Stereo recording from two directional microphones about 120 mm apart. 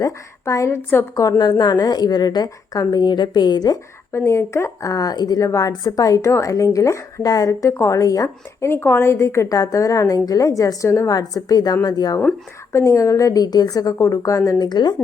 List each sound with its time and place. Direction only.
0.0 s a woman's voice: 25° left (ahead or behind)
1.1 s a woman's voice: 30° left (ahead or behind)
4.1 s a woman's voice: 20° left (ahead or behind)